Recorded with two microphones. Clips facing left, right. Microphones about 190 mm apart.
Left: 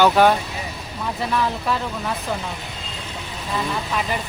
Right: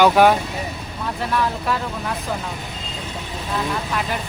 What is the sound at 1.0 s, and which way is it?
Speech, 5° left (ahead or behind).